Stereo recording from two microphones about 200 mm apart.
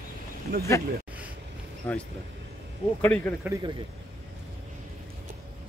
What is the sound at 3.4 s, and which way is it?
Speech, 15° right (ahead or behind).